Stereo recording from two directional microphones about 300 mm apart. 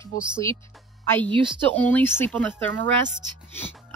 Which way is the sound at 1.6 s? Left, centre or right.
Centre.